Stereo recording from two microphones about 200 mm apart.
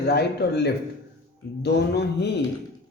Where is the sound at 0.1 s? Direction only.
55° left (ahead or behind).